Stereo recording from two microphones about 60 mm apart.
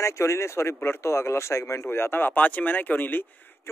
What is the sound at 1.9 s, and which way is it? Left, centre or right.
Speech, left.